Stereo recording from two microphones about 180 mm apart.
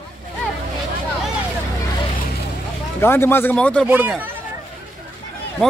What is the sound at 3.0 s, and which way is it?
Speech, 15° left (ahead or behind).